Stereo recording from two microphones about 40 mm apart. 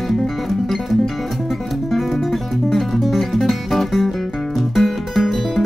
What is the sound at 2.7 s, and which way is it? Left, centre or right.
Music, centre.